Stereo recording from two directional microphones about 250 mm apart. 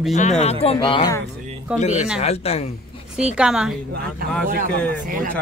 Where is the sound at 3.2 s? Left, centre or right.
Centre.